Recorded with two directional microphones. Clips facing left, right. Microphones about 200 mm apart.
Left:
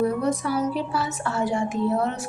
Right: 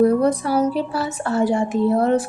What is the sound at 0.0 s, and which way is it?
A woman's voice, 35° right (ahead or behind).